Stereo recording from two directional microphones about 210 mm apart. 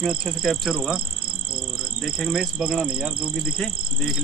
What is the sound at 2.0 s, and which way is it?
Speech, centre (ahead or behind).